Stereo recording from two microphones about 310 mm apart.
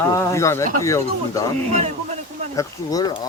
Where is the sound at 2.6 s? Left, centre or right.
Centre.